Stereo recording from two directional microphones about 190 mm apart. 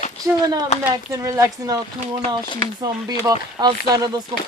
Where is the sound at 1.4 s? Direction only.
20° right (ahead or behind).